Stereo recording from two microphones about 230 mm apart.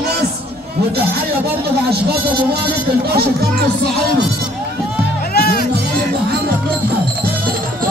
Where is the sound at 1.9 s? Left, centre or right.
Right.